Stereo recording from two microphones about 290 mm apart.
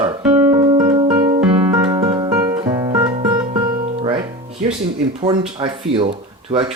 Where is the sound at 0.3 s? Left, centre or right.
Centre.